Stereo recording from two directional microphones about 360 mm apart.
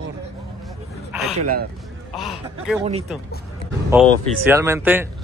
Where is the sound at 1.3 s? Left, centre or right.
Right.